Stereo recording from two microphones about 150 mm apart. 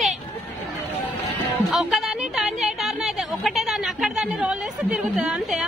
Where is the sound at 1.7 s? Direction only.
Centre (ahead or behind).